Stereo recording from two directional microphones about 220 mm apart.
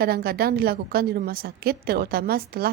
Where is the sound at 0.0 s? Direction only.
45° right (ahead or behind).